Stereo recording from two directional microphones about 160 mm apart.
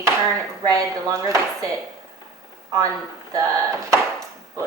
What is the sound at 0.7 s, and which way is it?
A woman's voice, 20° right (ahead or behind).